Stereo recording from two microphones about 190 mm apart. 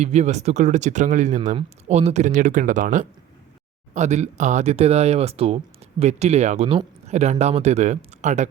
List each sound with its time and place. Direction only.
0.0 s speech: 35° right (ahead or behind)